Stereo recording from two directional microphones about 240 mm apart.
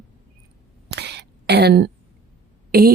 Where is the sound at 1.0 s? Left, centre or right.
Right.